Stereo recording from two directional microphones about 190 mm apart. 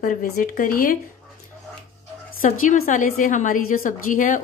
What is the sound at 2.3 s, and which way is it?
A woman's voice, 40° left (ahead or behind).